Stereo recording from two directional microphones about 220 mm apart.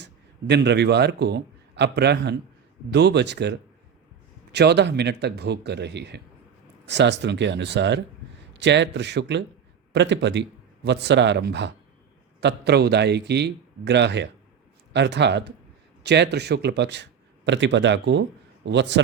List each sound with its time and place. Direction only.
0.0 s a man's voice: 50° right (ahead or behind)